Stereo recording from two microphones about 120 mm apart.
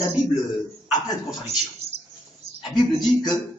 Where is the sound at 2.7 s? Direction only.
35° left (ahead or behind).